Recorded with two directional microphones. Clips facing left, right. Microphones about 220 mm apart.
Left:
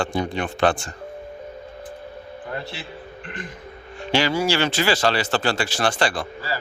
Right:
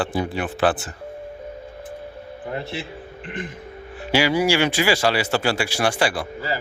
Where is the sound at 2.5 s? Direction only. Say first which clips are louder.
Right 3 dB; 20° right (ahead or behind).